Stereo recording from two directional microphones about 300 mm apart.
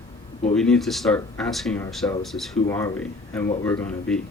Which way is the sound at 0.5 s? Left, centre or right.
Centre.